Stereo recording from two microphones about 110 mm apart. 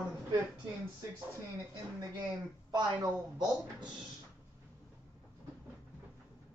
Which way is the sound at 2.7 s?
40° right (ahead or behind).